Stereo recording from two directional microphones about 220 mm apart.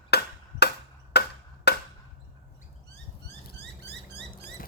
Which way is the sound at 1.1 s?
45° left (ahead or behind).